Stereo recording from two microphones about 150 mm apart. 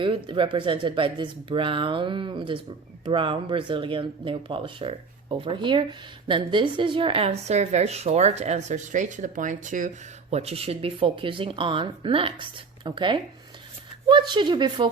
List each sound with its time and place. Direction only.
0.0 s a woman's voice: 35° right (ahead or behind)